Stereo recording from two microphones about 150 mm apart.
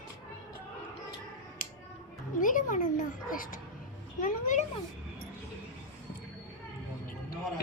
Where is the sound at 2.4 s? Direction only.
60° left (ahead or behind).